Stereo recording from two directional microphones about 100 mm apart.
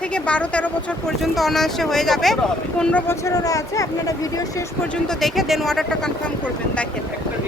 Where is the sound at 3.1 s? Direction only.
30° left (ahead or behind).